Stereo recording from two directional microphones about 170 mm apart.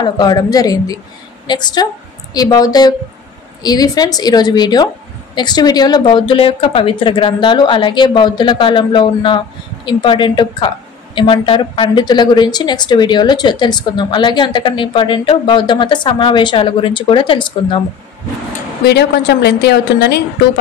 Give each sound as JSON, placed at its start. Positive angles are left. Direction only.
{"t": 0.0, "sound": "a woman's voice", "side_deg": 25}
{"t": 18.9, "sound": "a woman's voice", "side_deg": 75}